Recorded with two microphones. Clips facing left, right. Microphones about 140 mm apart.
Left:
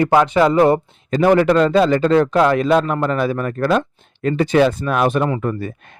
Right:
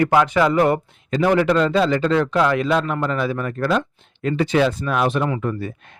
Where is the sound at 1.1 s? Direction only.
45° left (ahead or behind).